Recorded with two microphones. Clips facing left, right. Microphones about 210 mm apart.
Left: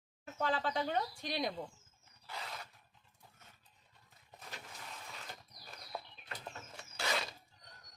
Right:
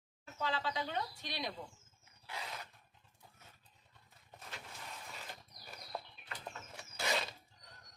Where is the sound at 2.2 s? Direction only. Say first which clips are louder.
Even; 5° right (ahead or behind).